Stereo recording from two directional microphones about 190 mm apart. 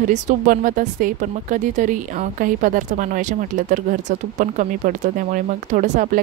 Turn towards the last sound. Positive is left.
turn(degrees=-45)  # may be behind; listen again after turning